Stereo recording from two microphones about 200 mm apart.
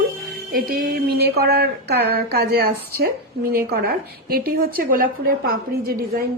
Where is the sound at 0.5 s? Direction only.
45° right (ahead or behind).